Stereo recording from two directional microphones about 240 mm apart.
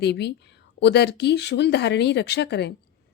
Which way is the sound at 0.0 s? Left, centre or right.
Left.